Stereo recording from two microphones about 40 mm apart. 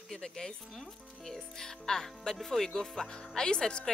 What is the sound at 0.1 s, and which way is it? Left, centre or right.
Speech, centre.